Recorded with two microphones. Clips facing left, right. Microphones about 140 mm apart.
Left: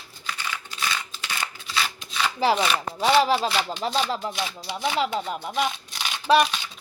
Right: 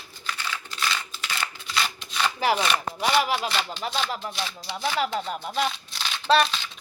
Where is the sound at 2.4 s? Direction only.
25° left (ahead or behind).